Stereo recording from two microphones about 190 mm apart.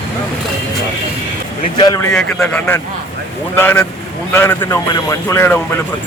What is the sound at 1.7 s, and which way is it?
Speech, 25° left (ahead or behind).